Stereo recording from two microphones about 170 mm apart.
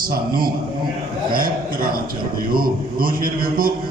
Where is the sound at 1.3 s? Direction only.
55° right (ahead or behind).